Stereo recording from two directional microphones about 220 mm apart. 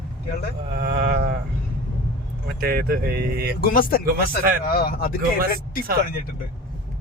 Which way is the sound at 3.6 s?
40° left (ahead or behind).